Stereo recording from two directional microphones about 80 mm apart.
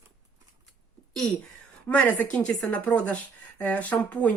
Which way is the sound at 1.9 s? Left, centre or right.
Centre.